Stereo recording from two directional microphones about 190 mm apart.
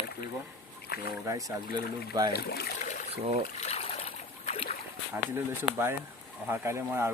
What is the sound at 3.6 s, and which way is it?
Trickle, 35° left (ahead or behind).